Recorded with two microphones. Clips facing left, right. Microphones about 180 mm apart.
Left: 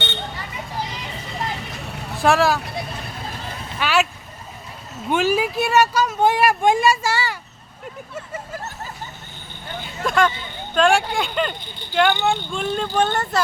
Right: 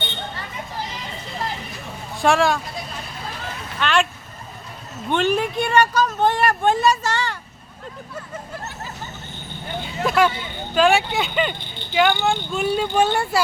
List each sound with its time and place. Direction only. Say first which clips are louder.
1.9 s vehicle: left 1 dB; 70° left (ahead or behind)
2.1 s speech: left 1 dB; centre (ahead or behind)
3.8 s vehicle: even; 5° left (ahead or behind)
5.0 s speech: left 1 dB; 5° left (ahead or behind)
9.8 s vehicle: right 1 dB; 5° right (ahead or behind)
10.8 s speech: even; 5° right (ahead or behind)